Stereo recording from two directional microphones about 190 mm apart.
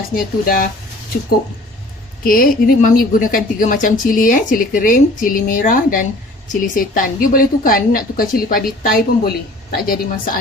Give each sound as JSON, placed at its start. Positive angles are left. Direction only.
{"t": 0.1, "sound": "a woman's voice", "side_deg": 50}
{"t": 2.2, "sound": "a woman's voice", "side_deg": 50}